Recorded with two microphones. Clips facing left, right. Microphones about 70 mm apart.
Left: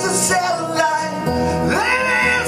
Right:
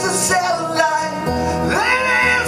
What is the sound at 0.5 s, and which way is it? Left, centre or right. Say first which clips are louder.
Music: right 1 dB; centre.